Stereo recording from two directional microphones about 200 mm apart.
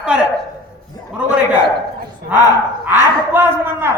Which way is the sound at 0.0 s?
5° right (ahead or behind).